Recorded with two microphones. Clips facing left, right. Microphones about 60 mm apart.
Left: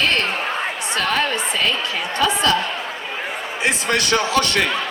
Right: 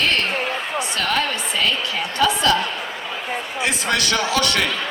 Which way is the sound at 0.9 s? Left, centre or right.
Left.